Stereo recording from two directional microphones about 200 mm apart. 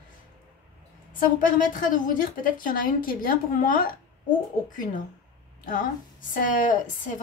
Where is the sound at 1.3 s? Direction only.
40° left (ahead or behind).